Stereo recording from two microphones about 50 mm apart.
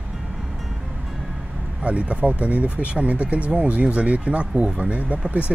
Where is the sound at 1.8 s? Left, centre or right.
Right.